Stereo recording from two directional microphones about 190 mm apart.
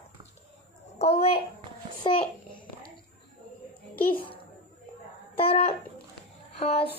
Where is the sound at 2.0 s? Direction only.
25° left (ahead or behind).